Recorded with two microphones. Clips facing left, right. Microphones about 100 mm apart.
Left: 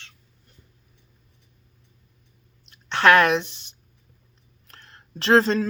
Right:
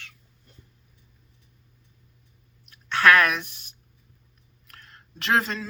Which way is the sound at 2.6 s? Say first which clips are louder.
Left 2 dB; 25° left (ahead or behind).